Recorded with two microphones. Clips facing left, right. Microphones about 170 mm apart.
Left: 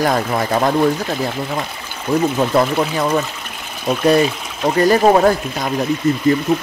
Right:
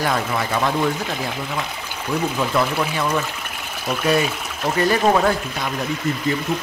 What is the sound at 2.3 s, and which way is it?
Speech, 40° left (ahead or behind).